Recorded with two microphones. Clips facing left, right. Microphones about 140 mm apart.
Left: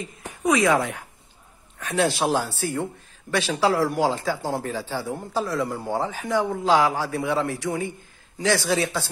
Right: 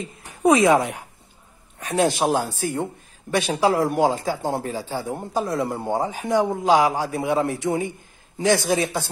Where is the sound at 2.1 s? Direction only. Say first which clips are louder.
Right 2 dB; 15° right (ahead or behind).